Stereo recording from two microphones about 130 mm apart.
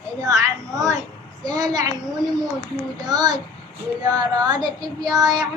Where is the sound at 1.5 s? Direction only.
30° right (ahead or behind).